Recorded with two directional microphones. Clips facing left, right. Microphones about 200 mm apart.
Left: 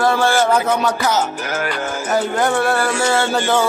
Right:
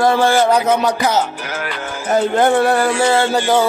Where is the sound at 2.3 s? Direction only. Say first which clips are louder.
Right 6 dB; 25° right (ahead or behind).